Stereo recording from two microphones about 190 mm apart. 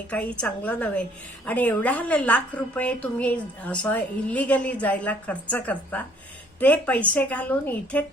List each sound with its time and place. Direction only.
0.1 s a woman's voice: 5° left (ahead or behind)